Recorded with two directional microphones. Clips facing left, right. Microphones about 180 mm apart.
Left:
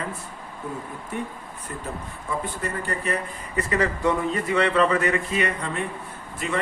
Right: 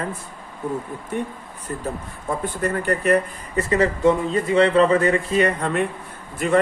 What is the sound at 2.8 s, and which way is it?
Speech, 65° right (ahead or behind).